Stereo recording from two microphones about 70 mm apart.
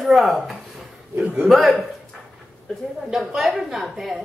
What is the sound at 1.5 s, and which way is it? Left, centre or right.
Speech, centre.